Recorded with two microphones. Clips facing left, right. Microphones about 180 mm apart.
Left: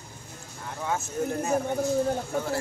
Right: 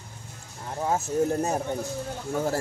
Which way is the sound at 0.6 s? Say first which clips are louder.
Right 4 dB; 35° right (ahead or behind).